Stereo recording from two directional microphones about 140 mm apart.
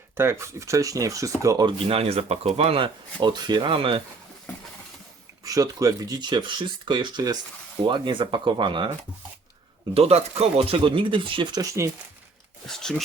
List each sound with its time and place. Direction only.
0.2 s speech: 20° right (ahead or behind)
1.9 s speech: 45° right (ahead or behind)
5.5 s speech: 25° right (ahead or behind)
9.9 s speech: 45° right (ahead or behind)
11.6 s speech: 20° right (ahead or behind)
12.6 s speech: 5° left (ahead or behind)